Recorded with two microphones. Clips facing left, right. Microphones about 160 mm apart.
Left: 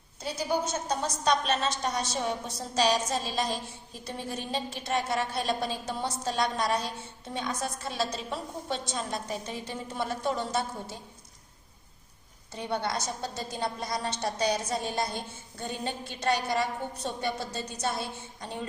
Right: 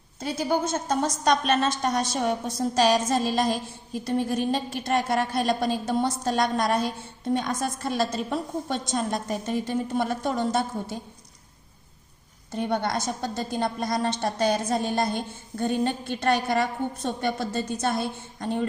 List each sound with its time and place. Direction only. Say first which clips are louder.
0.2 s a woman's voice: right 4 dB; 50° right (ahead or behind)
12.5 s a woman's voice: right 5 dB; 50° right (ahead or behind)